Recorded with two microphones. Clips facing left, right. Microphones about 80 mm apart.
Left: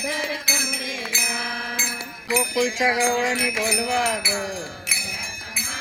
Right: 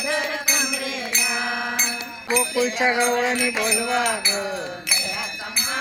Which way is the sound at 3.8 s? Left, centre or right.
Right.